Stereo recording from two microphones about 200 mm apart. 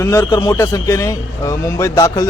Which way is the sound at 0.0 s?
15° left (ahead or behind).